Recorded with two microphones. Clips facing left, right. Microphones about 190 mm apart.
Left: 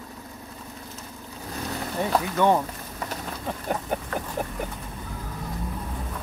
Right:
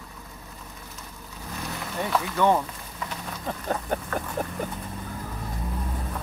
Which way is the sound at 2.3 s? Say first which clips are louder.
Even; 15° left (ahead or behind).